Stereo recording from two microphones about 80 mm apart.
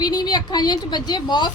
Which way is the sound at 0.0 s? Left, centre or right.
Left.